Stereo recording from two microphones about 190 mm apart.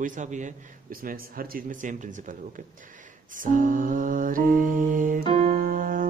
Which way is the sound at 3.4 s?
45° right (ahead or behind).